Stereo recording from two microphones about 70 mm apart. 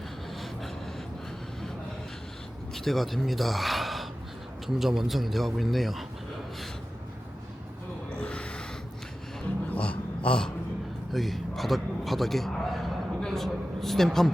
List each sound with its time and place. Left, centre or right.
2.7 s a man's voice: centre
8.1 s gasp: centre
9.6 s a sound: centre
11.1 s a man's voice: centre